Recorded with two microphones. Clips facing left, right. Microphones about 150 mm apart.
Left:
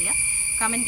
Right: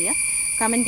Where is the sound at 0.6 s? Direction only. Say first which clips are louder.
Right 6 dB; 40° right (ahead or behind).